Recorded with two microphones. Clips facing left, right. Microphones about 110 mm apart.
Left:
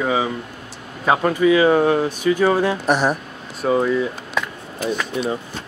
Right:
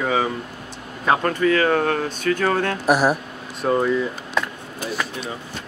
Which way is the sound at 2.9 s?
5° right (ahead or behind).